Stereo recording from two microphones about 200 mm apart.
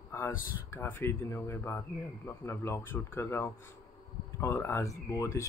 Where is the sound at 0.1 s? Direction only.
10° left (ahead or behind).